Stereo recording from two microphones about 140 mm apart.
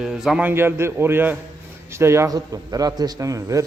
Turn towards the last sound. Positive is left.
turn(degrees=-25)  # may be behind; listen again after turning